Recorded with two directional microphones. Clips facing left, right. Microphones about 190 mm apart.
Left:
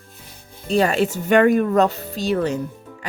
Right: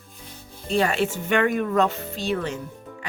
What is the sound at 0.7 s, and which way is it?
Speech, 35° left (ahead or behind).